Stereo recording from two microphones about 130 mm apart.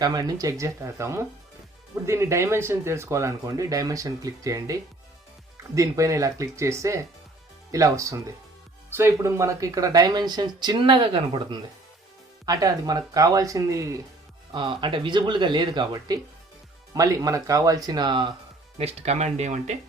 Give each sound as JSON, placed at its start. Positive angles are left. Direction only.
{"t": 0.0, "sound": "speech", "side_deg": -30}
{"t": 12.5, "sound": "speech", "side_deg": -30}
{"t": 14.5, "sound": "speech", "side_deg": -40}
{"t": 18.8, "sound": "speech", "side_deg": -55}